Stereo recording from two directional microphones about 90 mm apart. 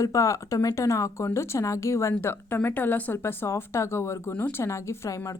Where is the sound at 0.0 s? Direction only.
35° left (ahead or behind).